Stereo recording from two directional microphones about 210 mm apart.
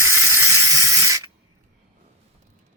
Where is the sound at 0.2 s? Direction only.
15° right (ahead or behind).